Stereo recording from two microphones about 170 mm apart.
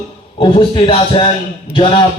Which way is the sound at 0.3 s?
30° left (ahead or behind).